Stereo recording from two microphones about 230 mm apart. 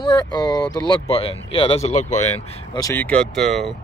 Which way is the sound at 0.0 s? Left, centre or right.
Centre.